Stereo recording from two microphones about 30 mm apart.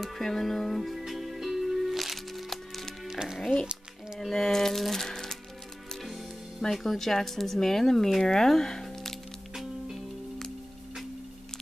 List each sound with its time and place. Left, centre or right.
0.0 s music: centre
3.3 s speech: centre
4.3 s music: centre
6.7 s speech: centre